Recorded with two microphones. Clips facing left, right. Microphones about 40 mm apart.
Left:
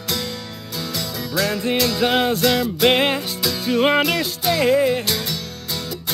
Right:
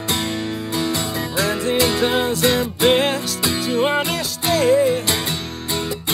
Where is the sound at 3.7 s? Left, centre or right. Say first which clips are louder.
Left 3 dB; left.